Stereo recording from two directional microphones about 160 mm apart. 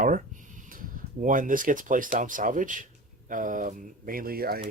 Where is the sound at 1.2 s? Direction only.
55° right (ahead or behind).